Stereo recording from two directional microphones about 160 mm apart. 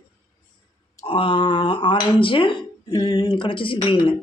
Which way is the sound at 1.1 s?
35° left (ahead or behind).